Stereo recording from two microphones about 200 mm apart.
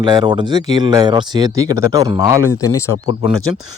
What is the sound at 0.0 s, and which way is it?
Speech, 20° right (ahead or behind).